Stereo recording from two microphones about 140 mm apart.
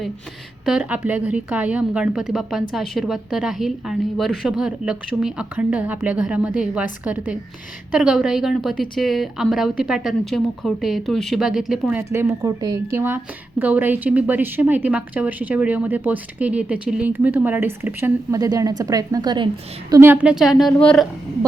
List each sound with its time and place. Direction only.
0.6 s a woman's voice: 5° right (ahead or behind)
12.1 s a woman's voice: 20° right (ahead or behind)
18.3 s a woman's voice: 25° right (ahead or behind)
19.9 s a woman's voice: 20° right (ahead or behind)
20.2 s speech: 5° right (ahead or behind)